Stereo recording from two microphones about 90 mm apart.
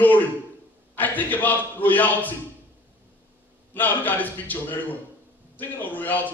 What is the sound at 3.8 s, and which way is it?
Speech, 20° left (ahead or behind).